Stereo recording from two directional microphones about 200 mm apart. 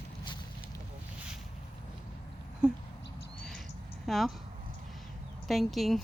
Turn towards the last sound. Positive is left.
turn(degrees=0)  # may be behind; listen again after turning